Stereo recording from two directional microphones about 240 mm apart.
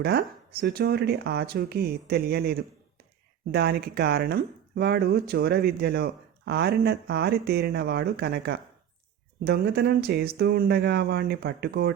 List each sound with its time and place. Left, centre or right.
0.0 s speech: right